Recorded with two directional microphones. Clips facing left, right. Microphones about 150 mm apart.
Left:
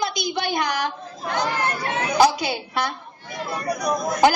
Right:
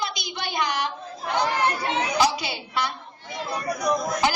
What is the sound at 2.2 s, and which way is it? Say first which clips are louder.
Speech: left 9 dB; 50° left (ahead or behind).